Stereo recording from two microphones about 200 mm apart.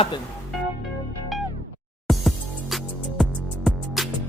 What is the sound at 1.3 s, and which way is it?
Music, centre (ahead or behind).